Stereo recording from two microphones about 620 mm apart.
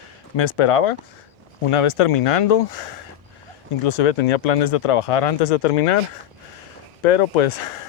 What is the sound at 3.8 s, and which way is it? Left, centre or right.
Speech, left.